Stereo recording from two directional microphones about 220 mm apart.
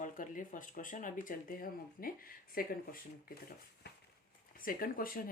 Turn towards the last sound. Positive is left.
turn(degrees=40)  # may be behind; listen again after turning